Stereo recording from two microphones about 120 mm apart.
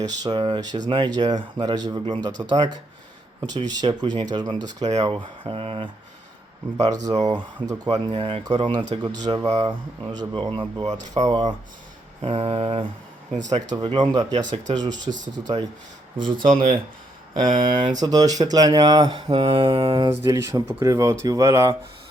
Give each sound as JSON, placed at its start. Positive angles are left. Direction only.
{"t": 0.0, "sound": "speech", "side_deg": -35}
{"t": 5.4, "sound": "mantra", "side_deg": -50}
{"t": 6.9, "sound": "speech", "side_deg": -30}
{"t": 8.1, "sound": "mantra", "side_deg": -50}
{"t": 8.4, "sound": "speech", "side_deg": -35}
{"t": 10.3, "sound": "mantra", "side_deg": -45}
{"t": 10.9, "sound": "speech", "side_deg": -35}
{"t": 12.2, "sound": "mantra", "side_deg": -50}
{"t": 13.7, "sound": "speech", "side_deg": -35}
{"t": 16.4, "sound": "speech", "side_deg": -90}
{"t": 17.6, "sound": "speech", "side_deg": -45}
{"t": 19.3, "sound": "mantra", "side_deg": -45}
{"t": 20.1, "sound": "speech", "side_deg": -25}